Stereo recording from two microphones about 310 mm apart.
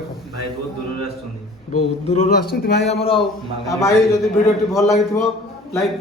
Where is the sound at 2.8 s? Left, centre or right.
Centre.